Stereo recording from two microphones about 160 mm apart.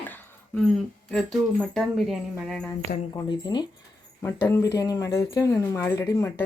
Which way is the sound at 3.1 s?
25° left (ahead or behind).